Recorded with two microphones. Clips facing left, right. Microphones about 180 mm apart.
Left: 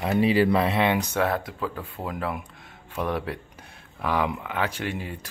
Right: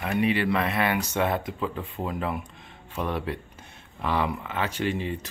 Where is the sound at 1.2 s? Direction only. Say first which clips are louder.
Left 1 dB; centre (ahead or behind).